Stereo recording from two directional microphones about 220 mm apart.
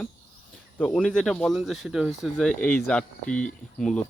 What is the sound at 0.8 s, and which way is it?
Speech, 5° left (ahead or behind).